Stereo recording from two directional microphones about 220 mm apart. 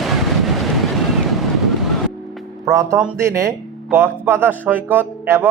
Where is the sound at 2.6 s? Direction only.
15° right (ahead or behind).